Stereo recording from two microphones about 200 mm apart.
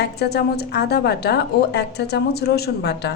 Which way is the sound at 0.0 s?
55° left (ahead or behind).